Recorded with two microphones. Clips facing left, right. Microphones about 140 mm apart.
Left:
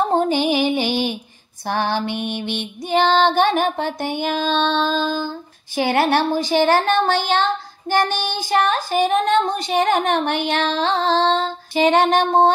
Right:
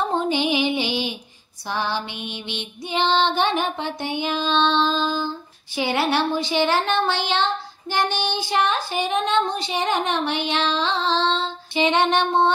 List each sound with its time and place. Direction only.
0.1 s music: 45° left (ahead or behind)
1.7 s speech: 55° left (ahead or behind)